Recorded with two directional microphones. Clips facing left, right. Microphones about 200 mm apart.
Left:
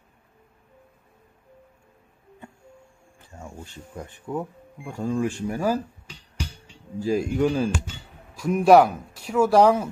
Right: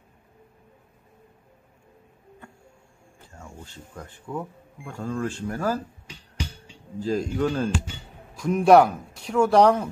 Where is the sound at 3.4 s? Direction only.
15° left (ahead or behind).